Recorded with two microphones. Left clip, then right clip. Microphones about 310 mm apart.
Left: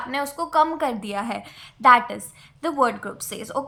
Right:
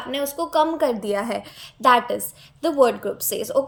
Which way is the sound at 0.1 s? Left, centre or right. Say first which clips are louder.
Right 1 dB; left.